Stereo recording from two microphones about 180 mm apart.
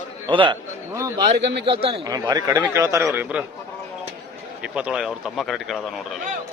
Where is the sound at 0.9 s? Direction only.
15° right (ahead or behind).